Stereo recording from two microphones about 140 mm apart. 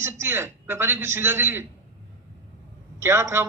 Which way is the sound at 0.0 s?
20° right (ahead or behind).